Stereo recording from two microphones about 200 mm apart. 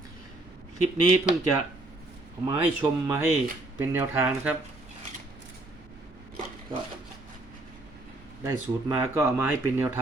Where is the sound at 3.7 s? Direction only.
10° right (ahead or behind).